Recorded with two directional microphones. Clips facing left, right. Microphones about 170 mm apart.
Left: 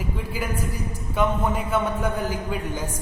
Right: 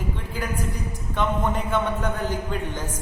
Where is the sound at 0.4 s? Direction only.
5° left (ahead or behind).